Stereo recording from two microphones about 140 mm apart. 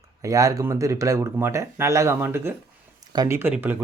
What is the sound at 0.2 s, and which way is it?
Speech, 25° right (ahead or behind).